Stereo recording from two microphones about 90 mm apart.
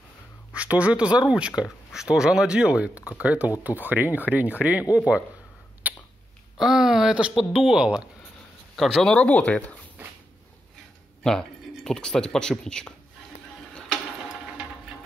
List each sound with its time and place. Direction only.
0.6 s speech: 15° right (ahead or behind)
5.8 s a sound: 20° right (ahead or behind)
6.6 s speech: 5° right (ahead or behind)
8.7 s speech: 5° left (ahead or behind)
11.2 s speech: 5° left (ahead or behind)